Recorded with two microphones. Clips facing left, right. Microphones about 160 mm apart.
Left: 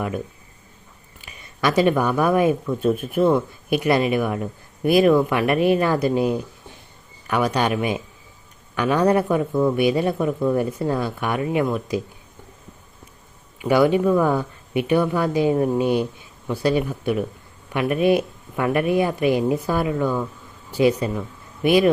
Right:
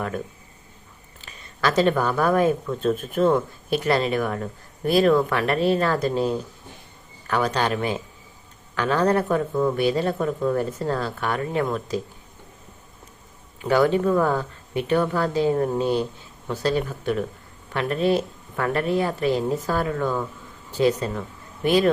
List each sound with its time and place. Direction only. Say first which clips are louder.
1.2 s speech: left 2 dB; 10° left (ahead or behind)
13.6 s speech: left 2 dB; 10° left (ahead or behind)